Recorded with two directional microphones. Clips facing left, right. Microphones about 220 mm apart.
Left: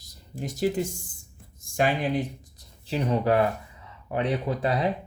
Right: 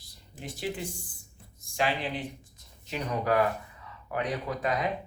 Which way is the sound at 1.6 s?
45° left (ahead or behind).